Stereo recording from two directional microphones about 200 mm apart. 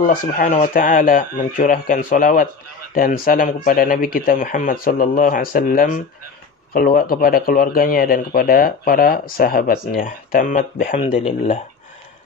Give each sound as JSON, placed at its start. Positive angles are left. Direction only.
{"t": 0.0, "sound": "speech", "side_deg": 45}